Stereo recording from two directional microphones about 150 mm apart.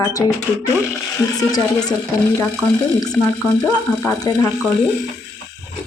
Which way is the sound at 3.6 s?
15° left (ahead or behind).